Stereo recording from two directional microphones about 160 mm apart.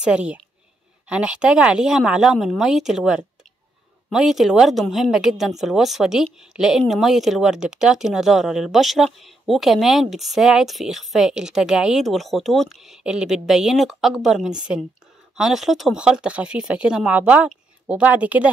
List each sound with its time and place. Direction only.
0.0 s speech: 5° right (ahead or behind)